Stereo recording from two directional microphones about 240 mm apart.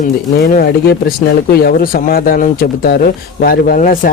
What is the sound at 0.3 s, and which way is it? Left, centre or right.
Speech, left.